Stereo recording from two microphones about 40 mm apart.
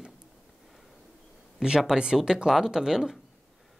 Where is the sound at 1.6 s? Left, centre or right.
Right.